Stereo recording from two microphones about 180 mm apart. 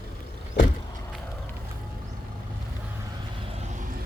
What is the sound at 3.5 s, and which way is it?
Vehicle, 45° right (ahead or behind).